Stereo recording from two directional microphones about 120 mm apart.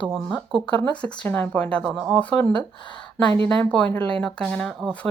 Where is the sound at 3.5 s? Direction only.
10° left (ahead or behind).